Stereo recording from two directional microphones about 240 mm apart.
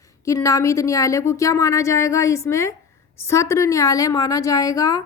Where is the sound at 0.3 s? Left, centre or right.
Centre.